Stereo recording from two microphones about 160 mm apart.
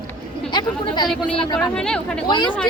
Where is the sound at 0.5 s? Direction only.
25° left (ahead or behind).